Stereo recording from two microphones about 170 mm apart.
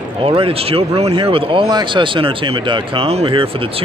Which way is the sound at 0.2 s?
30° right (ahead or behind).